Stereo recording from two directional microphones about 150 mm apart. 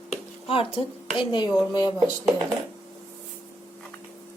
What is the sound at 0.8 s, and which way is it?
Speech, 35° left (ahead or behind).